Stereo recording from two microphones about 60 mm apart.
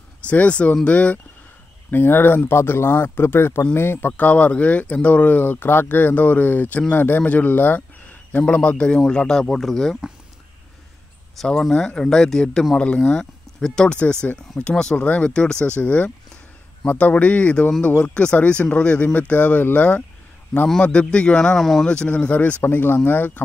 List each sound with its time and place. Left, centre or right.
0.3 s speech: left
1.9 s speech: left
4.2 s speech: left; by 9.9 s centre
11.3 s speech: centre
21.8 s speech: centre
22.6 s speech: left